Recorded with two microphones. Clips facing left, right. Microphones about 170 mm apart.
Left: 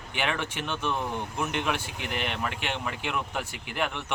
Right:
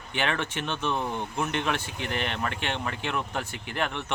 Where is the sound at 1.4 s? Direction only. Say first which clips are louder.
Right 1 dB; 10° left (ahead or behind).